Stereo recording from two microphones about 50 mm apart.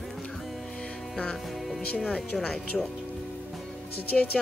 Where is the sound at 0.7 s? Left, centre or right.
Centre.